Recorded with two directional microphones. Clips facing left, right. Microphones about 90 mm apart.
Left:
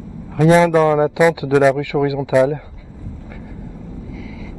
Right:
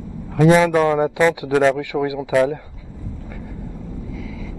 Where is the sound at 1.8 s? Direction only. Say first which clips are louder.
Left 4 dB; 15° right (ahead or behind).